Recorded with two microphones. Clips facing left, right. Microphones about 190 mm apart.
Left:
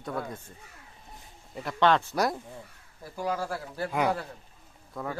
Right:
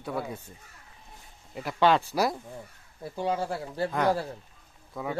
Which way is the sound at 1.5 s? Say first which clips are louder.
Right 1 dB; 10° right (ahead or behind).